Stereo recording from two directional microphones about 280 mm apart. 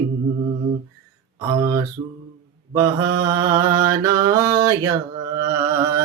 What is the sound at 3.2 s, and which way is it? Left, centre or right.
Mantra, centre.